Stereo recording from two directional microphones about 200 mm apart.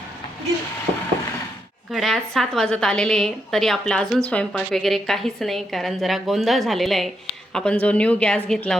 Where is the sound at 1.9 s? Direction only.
Centre (ahead or behind).